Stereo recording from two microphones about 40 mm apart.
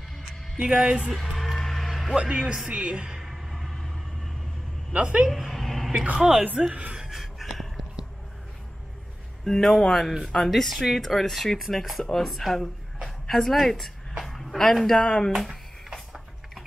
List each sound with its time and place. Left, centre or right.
0.6 s a man's voice: right
1.2 s a sound: centre
2.1 s a man's voice: right
3.2 s music: centre
4.9 s a woman's voice: right
5.5 s a sound: centre
6.1 s a woman's voice: centre
7.0 s a sound: centre
9.4 s speech: centre
12.0 s speech: centre
15.0 s speech: centre